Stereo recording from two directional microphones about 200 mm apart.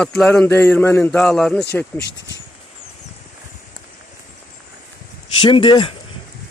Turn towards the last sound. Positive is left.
turn(degrees=25)  # may be behind; listen again after turning